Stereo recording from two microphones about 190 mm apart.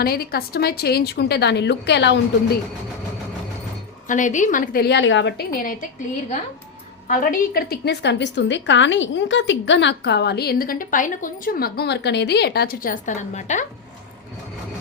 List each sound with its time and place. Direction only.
0.0 s a woman's voice: 55° left (ahead or behind)
4.0 s a woman's voice: 40° left (ahead or behind)
7.1 s a woman's voice: 45° left (ahead or behind)